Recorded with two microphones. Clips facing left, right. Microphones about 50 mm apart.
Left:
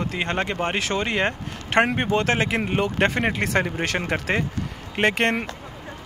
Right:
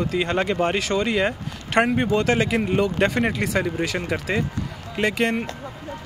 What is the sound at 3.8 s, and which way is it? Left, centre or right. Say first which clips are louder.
Speech: left 1 dB; left.